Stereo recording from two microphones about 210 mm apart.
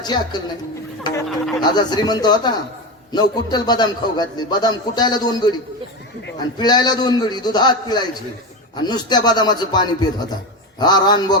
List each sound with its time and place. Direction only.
0.0 s a man's voice: 20° left (ahead or behind)
1.6 s a man's voice: 20° left (ahead or behind)
6.6 s a man's voice: 20° left (ahead or behind)